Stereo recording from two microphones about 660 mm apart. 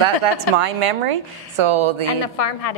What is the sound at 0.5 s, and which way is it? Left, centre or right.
Speech, right.